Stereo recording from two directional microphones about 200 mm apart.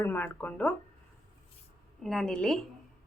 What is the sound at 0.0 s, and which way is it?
Speech, 10° left (ahead or behind).